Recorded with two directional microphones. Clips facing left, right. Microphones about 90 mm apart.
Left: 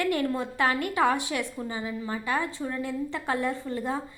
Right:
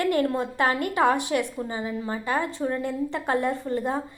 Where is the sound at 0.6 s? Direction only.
45° right (ahead or behind).